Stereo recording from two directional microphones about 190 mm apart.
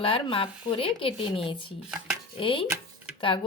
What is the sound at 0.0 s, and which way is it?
Speech, 30° left (ahead or behind).